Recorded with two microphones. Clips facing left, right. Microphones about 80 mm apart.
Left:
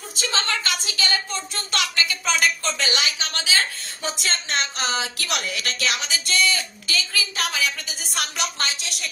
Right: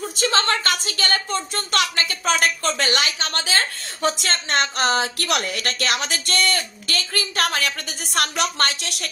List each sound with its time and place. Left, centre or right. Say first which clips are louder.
0.1 s a woman's voice: right 4 dB; right